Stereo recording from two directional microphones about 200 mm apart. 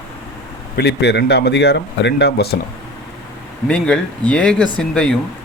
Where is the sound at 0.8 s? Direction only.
55° left (ahead or behind).